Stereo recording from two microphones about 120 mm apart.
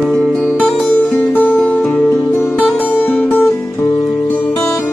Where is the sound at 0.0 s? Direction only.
5° left (ahead or behind).